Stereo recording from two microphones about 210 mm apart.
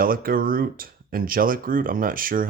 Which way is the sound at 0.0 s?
45° right (ahead or behind).